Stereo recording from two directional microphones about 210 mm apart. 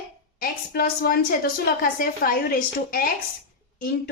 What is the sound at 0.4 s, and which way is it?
A woman's voice, 45° left (ahead or behind).